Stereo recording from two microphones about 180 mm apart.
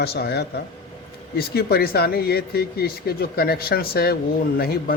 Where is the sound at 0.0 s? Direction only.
65° left (ahead or behind).